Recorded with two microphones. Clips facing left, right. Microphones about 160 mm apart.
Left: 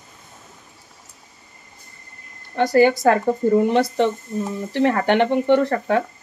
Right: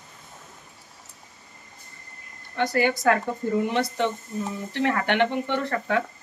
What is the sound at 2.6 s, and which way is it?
Speech, 35° left (ahead or behind).